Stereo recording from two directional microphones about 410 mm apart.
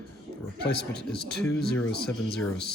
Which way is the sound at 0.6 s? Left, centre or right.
Left.